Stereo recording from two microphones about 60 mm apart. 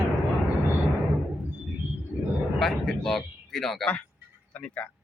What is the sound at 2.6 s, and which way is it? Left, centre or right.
Speech, centre.